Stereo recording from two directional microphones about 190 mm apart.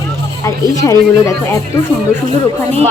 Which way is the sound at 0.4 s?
15° left (ahead or behind).